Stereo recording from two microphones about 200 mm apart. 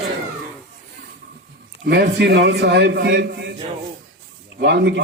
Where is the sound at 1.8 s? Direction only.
55° right (ahead or behind).